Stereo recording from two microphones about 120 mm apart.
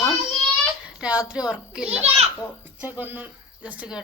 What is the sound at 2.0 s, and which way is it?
Speech, 60° right (ahead or behind).